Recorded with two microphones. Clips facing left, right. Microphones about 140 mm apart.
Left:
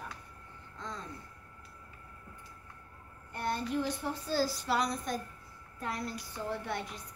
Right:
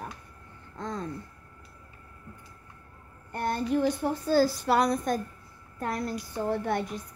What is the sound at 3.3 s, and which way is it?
A woman's voice, 50° right (ahead or behind).